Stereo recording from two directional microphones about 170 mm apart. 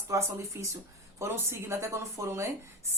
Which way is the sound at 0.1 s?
15° right (ahead or behind).